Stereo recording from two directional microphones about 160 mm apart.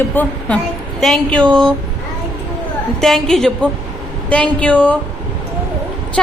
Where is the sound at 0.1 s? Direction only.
10° left (ahead or behind).